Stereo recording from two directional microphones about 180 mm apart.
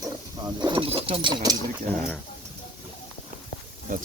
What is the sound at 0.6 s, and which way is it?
Bird, 25° right (ahead or behind).